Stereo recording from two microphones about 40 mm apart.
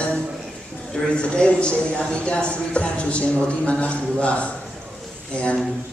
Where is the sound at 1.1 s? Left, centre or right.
Left.